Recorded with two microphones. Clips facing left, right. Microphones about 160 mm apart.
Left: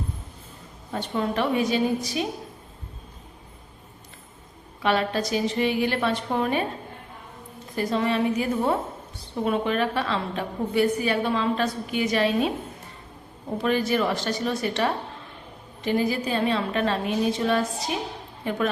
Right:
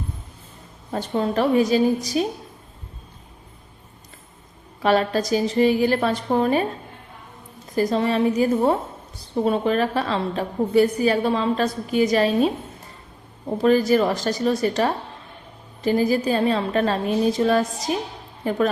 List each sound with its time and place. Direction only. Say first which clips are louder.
0.9 s a woman's voice: right 4 dB; 40° right (ahead or behind)
4.8 s a woman's voice: right 4 dB; 40° right (ahead or behind)
7.8 s a woman's voice: right 4 dB; 35° right (ahead or behind)
13.6 s a woman's voice: right 6 dB; 40° right (ahead or behind)